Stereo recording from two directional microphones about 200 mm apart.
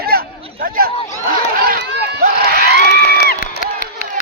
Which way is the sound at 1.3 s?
45° right (ahead or behind).